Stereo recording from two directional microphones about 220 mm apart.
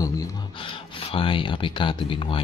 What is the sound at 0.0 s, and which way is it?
Speech, 15° left (ahead or behind).